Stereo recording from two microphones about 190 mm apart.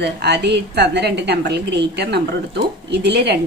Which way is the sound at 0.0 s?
60° right (ahead or behind).